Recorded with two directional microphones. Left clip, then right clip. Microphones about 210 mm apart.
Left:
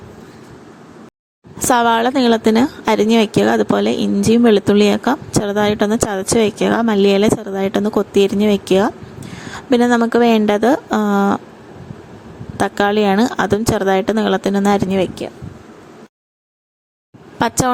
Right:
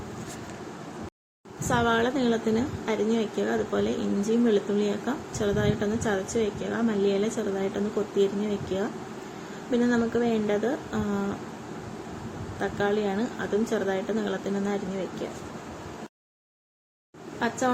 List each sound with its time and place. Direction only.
1.5 s a woman's voice: 50° left (ahead or behind)
12.5 s a woman's voice: 55° left (ahead or behind)